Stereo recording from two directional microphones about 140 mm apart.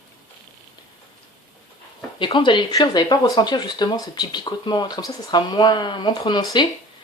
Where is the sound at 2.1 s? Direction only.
35° left (ahead or behind).